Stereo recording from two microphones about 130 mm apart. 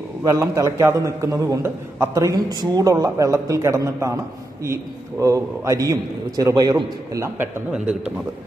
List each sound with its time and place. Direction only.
0.2 s a man's voice: 25° right (ahead or behind)
5.2 s a man's voice: 25° right (ahead or behind)